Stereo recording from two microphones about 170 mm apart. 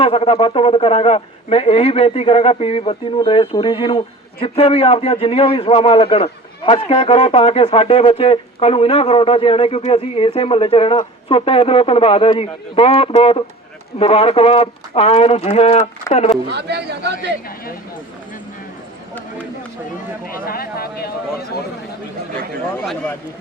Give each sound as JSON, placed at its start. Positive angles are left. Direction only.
{"t": 0.0, "sound": "speech", "side_deg": 35}
{"t": 16.5, "sound": "speech", "side_deg": -75}
{"t": 20.2, "sound": "speech", "side_deg": 60}
{"t": 22.8, "sound": "speech", "side_deg": 5}